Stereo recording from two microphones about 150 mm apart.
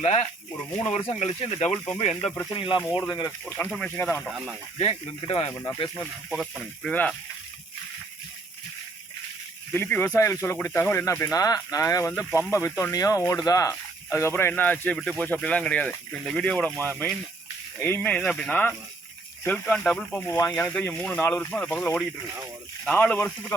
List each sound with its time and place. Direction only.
0.0 s speech: 45° left (ahead or behind); by 3.3 s 25° left (ahead or behind)
3.7 s speech: 5° left (ahead or behind)
4.8 s speech: 40° left (ahead or behind)
6.3 s speech: centre (ahead or behind)
9.7 s speech: 15° left (ahead or behind)